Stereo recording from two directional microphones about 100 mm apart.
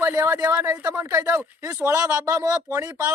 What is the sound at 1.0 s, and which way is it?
Speech, 35° right (ahead or behind).